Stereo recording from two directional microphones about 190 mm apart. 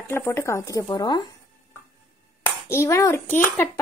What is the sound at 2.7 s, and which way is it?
Speech, 15° left (ahead or behind).